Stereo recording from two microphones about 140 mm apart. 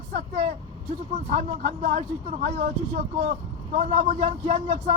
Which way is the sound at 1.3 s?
65° right (ahead or behind).